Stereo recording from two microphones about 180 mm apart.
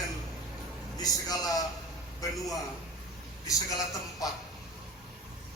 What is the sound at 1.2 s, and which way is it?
A man's voice, 20° left (ahead or behind).